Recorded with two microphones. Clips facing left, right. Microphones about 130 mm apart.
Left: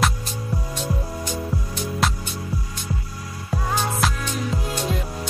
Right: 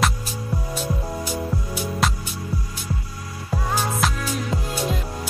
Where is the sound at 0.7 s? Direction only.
5° right (ahead or behind).